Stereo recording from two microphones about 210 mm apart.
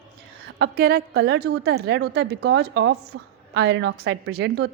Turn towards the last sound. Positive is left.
turn(degrees=-50)  # may be behind; listen again after turning